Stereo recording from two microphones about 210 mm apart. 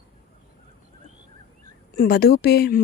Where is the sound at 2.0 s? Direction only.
45° left (ahead or behind).